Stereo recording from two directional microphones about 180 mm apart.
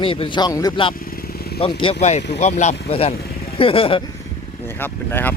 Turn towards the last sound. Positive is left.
turn(degrees=10)  # may be behind; listen again after turning